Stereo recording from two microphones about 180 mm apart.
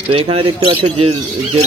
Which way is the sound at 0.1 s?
30° right (ahead or behind).